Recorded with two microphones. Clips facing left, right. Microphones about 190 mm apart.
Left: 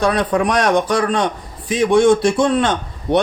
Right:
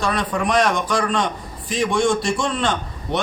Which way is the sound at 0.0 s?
60° left (ahead or behind).